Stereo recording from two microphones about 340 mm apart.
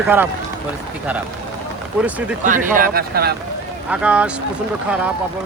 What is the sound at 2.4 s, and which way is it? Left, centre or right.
Speech, right.